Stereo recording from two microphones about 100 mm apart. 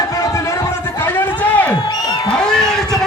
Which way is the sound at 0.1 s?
30° left (ahead or behind).